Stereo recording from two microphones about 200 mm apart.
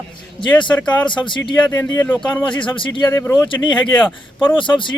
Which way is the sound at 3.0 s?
10° left (ahead or behind).